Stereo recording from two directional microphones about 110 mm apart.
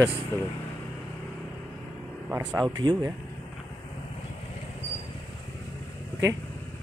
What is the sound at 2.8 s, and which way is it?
Speech, 45° right (ahead or behind).